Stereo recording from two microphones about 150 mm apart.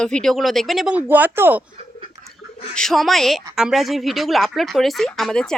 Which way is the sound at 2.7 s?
Centre (ahead or behind).